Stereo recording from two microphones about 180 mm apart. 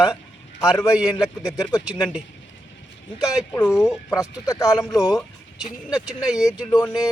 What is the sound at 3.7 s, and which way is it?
Speech, 20° left (ahead or behind).